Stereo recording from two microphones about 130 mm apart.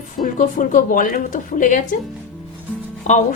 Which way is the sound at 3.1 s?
65° left (ahead or behind).